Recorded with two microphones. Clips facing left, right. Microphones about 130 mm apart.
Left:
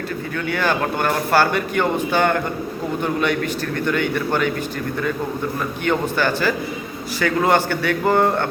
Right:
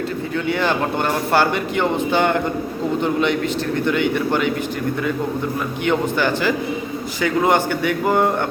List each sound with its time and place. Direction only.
0.4 s a man's voice: 20° right (ahead or behind)
5.8 s a man's voice: 15° right (ahead or behind)